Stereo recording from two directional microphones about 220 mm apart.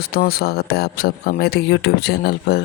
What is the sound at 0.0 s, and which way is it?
Speech, 45° left (ahead or behind).